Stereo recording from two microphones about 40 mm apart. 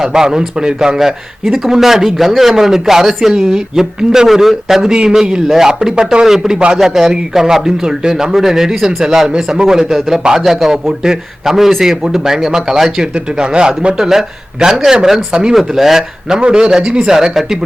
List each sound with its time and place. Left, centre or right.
0.0 s speech: centre
16.4 s speech: right